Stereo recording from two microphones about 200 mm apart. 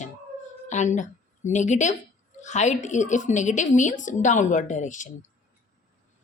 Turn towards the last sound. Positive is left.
turn(degrees=40)  # may be behind; listen again after turning